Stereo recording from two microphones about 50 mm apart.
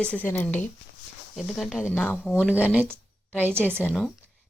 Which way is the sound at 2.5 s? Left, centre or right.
Right.